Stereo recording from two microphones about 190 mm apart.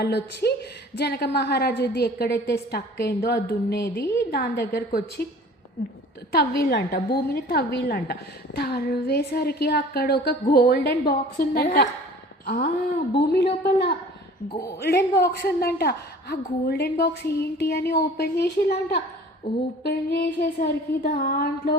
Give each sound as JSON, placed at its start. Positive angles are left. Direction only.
{"t": 0.0, "sound": "a woman's voice", "side_deg": 60}
{"t": 6.3, "sound": "a woman's voice", "side_deg": 55}
{"t": 12.5, "sound": "a sound", "side_deg": 45}
{"t": 13.1, "sound": "a woman's voice", "side_deg": 60}